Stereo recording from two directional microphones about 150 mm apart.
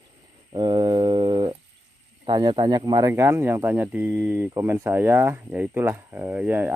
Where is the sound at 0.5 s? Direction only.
30° right (ahead or behind).